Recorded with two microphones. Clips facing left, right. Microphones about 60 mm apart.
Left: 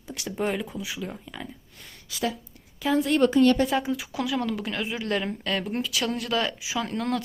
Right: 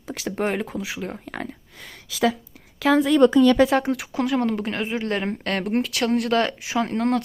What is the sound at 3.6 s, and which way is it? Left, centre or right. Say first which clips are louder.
Speech: right 6 dB; right.